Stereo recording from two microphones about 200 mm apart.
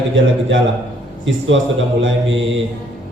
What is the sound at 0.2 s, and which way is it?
Speech, 75° right (ahead or behind).